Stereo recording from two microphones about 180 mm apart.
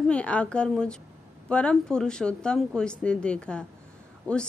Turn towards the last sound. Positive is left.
turn(degrees=5)  # may be behind; listen again after turning